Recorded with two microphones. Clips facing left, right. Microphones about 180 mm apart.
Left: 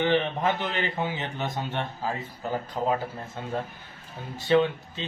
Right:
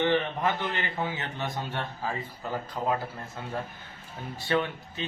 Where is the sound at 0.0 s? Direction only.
20° left (ahead or behind).